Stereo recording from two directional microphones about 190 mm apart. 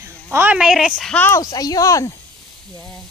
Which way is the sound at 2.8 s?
5° left (ahead or behind).